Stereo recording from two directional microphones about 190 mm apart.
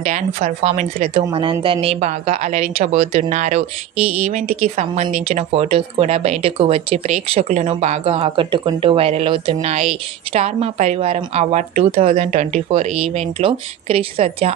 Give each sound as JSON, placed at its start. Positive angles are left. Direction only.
{"t": 0.0, "sound": "speech", "side_deg": -40}